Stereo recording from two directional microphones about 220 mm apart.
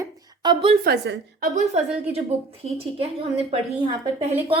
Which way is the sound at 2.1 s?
25° right (ahead or behind).